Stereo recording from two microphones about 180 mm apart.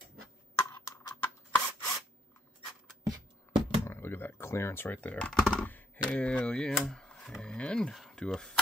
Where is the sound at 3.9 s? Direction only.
15° left (ahead or behind).